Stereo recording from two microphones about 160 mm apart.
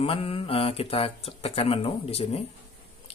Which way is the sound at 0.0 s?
35° left (ahead or behind).